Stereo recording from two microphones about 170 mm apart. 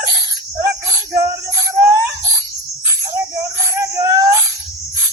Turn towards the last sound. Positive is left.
turn(degrees=-20)  # may be behind; listen again after turning